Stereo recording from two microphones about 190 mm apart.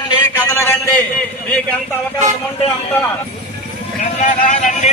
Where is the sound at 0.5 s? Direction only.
10° left (ahead or behind).